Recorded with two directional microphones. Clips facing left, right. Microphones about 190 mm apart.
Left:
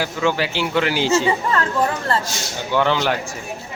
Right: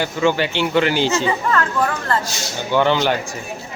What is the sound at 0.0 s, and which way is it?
A man's voice, centre (ahead or behind).